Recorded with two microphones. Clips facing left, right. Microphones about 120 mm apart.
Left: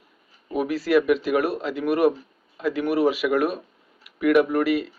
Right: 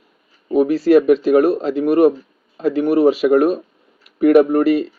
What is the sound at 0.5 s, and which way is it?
Speech, 35° right (ahead or behind).